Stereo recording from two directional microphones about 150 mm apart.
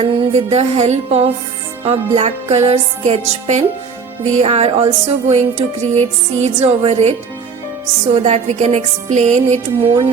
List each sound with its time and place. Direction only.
0.0 s music: 40° right (ahead or behind); by 9.6 s 55° right (ahead or behind)
9.8 s speech: 40° right (ahead or behind)